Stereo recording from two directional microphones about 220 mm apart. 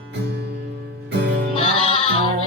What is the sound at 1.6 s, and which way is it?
Music, 25° left (ahead or behind).